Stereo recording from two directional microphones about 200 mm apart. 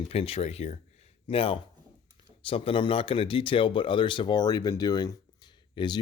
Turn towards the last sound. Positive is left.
turn(degrees=20)  # may be behind; listen again after turning